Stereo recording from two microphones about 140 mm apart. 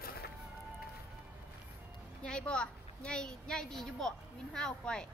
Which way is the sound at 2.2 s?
5° left (ahead or behind).